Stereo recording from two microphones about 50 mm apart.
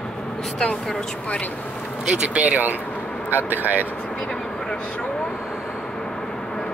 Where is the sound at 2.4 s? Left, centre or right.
Right.